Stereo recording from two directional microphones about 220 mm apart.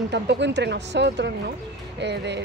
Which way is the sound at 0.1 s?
50° right (ahead or behind).